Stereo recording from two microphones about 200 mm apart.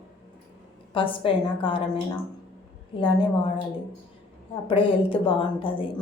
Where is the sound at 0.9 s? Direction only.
25° left (ahead or behind).